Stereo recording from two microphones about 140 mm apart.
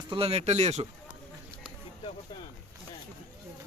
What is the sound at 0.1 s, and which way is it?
Speech, 45° right (ahead or behind).